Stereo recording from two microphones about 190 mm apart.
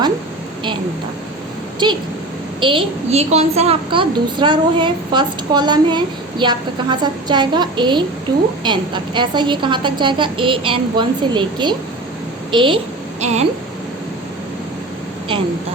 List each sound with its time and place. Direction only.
2.6 s a woman's voice: 25° right (ahead or behind)